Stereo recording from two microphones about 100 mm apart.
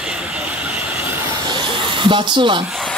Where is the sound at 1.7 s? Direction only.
55° right (ahead or behind).